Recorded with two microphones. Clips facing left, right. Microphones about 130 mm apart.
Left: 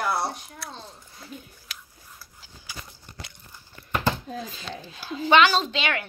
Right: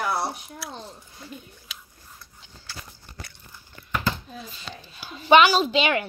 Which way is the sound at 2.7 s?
15° left (ahead or behind).